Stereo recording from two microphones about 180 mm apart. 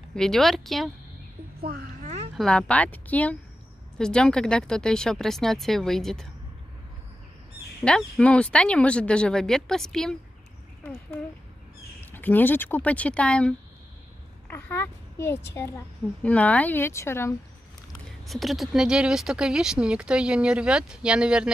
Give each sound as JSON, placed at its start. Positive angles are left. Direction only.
{"t": 0.1, "sound": "speech", "side_deg": 0}
{"t": 1.6, "sound": "a sound", "side_deg": -50}
{"t": 2.3, "sound": "a woman's voice", "side_deg": 5}
{"t": 7.8, "sound": "speech", "side_deg": 5}
{"t": 12.0, "sound": "a woman's voice", "side_deg": 10}
{"t": 18.2, "sound": "speech", "side_deg": 0}